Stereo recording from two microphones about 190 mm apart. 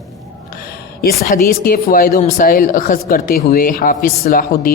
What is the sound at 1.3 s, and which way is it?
Speech, 50° left (ahead or behind).